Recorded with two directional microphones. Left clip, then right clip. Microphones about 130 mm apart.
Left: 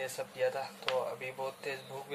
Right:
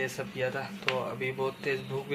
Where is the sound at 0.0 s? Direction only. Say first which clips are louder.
Right 2 dB; 15° left (ahead or behind).